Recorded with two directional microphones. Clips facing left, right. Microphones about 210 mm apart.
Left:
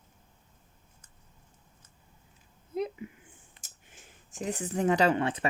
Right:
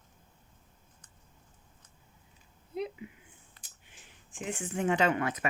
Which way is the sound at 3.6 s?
45° left (ahead or behind).